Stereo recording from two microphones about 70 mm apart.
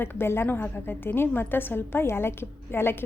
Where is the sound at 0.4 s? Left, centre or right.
Left.